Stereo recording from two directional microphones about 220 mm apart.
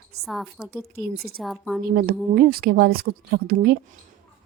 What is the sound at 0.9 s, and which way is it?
Speech, 45° right (ahead or behind).